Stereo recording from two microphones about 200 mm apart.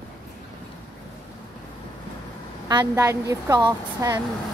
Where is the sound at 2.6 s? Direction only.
15° right (ahead or behind).